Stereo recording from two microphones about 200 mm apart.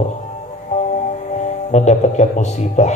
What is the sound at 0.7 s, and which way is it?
Music, 35° left (ahead or behind).